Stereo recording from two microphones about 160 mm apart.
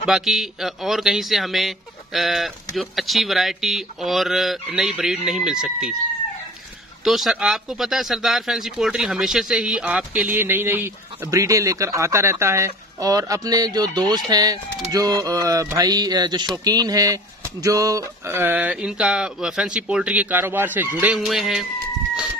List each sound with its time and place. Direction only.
0.0 s speech: 5° right (ahead or behind)
7.1 s speech: centre (ahead or behind)